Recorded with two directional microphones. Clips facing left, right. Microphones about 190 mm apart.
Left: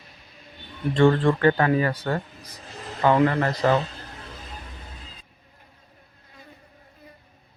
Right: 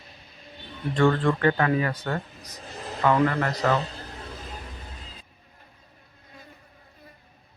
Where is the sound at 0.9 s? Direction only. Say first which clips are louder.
Left 3 dB; 30° left (ahead or behind).